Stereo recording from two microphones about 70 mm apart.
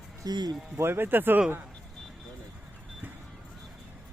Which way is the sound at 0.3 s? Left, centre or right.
Right.